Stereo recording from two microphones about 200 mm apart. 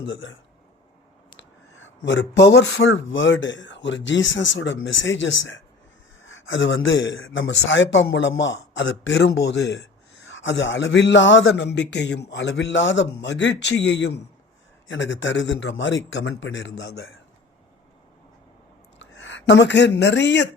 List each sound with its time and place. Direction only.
0.0 s speech: 70° left (ahead or behind)
1.4 s a man's voice: 65° left (ahead or behind)
18.9 s speech: 65° left (ahead or behind)